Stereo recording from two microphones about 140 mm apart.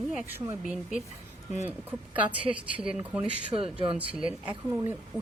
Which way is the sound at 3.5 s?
40° right (ahead or behind).